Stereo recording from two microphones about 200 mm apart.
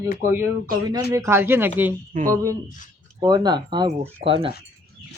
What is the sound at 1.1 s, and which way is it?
Speech, 15° right (ahead or behind).